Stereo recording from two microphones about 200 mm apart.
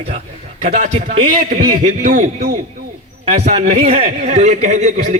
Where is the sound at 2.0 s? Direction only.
40° right (ahead or behind).